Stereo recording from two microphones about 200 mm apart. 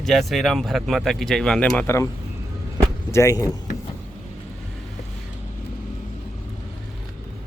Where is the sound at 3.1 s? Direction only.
15° left (ahead or behind).